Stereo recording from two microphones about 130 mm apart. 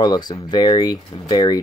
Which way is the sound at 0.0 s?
30° left (ahead or behind).